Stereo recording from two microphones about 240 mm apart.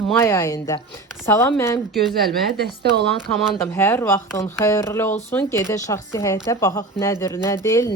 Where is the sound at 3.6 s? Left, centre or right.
Centre.